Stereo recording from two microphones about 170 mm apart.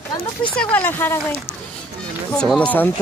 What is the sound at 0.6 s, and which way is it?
Speech, 10° left (ahead or behind).